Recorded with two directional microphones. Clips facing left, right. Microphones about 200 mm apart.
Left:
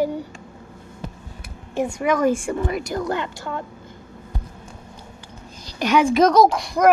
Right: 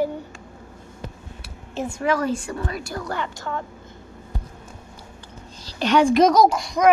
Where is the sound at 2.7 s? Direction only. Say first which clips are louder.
Left 6 dB; 20° left (ahead or behind).